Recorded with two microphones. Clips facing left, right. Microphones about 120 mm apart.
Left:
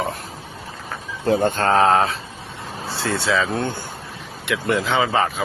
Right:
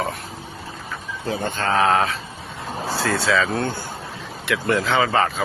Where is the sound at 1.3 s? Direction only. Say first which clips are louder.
Left 6 dB; 50° left (ahead or behind).